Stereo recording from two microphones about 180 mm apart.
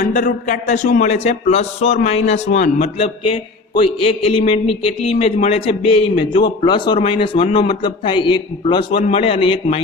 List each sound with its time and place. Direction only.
0.0 s a man's voice: 45° left (ahead or behind); by 9.8 s 30° left (ahead or behind)